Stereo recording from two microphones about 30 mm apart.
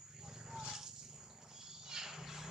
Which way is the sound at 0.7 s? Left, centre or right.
Centre.